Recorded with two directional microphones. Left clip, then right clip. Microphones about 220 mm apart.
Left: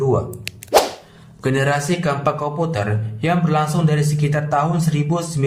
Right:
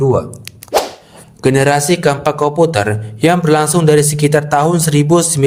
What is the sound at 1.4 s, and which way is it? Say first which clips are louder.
A man's voice: right 8 dB; 35° right (ahead or behind).